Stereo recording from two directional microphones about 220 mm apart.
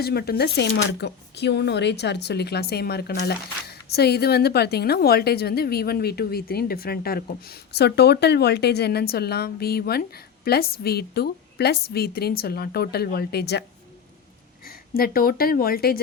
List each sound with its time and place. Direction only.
0.0 s speech: 45° left (ahead or behind)